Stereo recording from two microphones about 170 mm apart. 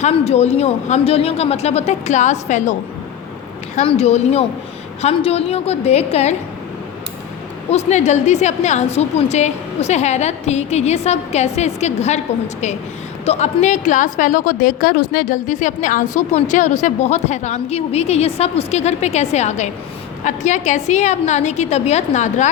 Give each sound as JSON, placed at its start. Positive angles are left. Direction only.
{"t": 0.0, "sound": "a woman's voice", "side_deg": 40}
{"t": 3.8, "sound": "a woman's voice", "side_deg": 40}
{"t": 7.7, "sound": "a woman's voice", "side_deg": 40}
{"t": 13.2, "sound": "a woman's voice", "side_deg": 40}